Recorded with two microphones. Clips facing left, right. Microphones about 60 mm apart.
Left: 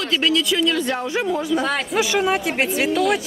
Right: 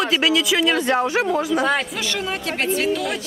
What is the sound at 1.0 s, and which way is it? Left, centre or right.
Speech, right.